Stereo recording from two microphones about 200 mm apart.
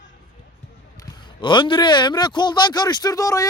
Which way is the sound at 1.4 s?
25° left (ahead or behind).